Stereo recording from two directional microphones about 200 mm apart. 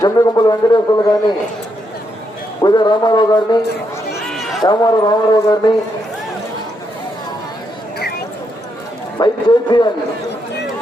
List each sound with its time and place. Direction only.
0.0 s speech: 20° left (ahead or behind)
2.6 s speech: 20° left (ahead or behind)
4.3 s a sound: centre (ahead or behind)
4.6 s speech: 20° left (ahead or behind)
9.1 s speech: 20° left (ahead or behind)